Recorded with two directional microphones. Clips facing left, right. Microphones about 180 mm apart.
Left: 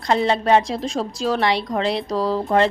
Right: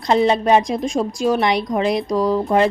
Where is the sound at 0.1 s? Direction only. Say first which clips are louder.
Right 2 dB; 20° right (ahead or behind).